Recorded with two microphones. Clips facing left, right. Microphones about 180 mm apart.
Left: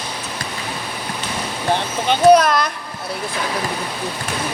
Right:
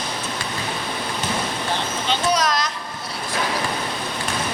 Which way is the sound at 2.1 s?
55° left (ahead or behind).